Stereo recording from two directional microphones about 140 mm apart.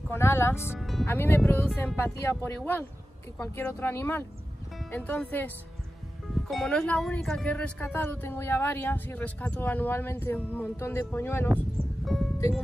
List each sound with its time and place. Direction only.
0.1 s speech: 15° left (ahead or behind)
0.7 s music: centre (ahead or behind)
1.0 s speech: 15° left (ahead or behind)
12.0 s music: centre (ahead or behind)